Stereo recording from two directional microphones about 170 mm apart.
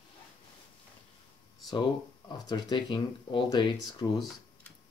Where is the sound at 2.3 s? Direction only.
25° left (ahead or behind).